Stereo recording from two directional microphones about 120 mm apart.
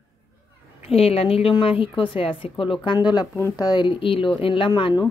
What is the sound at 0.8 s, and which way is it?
A woman's voice, 55° left (ahead or behind).